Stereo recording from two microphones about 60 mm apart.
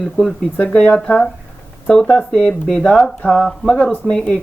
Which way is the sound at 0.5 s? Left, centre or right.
Left.